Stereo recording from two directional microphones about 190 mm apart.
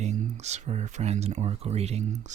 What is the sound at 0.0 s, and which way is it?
Speech, 35° right (ahead or behind).